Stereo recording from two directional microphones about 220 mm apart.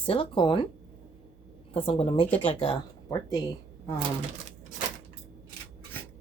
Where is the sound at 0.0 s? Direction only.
25° left (ahead or behind).